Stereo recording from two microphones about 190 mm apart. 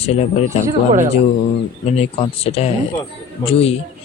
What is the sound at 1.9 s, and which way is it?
Speech, 30° left (ahead or behind).